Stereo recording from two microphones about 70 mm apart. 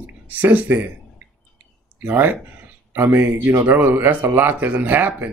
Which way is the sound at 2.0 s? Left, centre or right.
Right.